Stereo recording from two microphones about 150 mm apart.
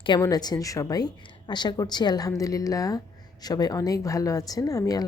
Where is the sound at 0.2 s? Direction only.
25° left (ahead or behind).